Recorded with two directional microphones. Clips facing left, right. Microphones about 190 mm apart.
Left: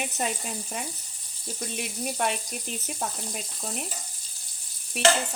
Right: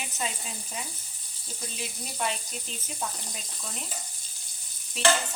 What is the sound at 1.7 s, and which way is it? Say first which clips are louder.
Speech: left 5 dB; 60° left (ahead or behind).